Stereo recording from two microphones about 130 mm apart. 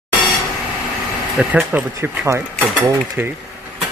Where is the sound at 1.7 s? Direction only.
20° right (ahead or behind).